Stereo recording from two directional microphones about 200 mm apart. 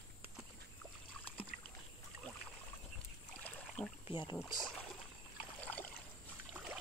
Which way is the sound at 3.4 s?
5° left (ahead or behind).